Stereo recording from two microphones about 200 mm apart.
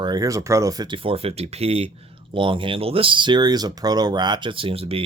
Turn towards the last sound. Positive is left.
turn(degrees=-30)  # may be behind; listen again after turning